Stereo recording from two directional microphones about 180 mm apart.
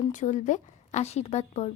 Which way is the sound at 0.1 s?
40° left (ahead or behind).